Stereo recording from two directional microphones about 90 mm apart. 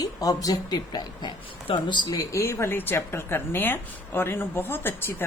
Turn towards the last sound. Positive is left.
turn(degrees=25)  # may be behind; listen again after turning